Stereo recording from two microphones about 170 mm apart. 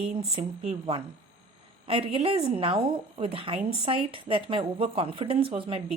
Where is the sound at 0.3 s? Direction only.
35° right (ahead or behind).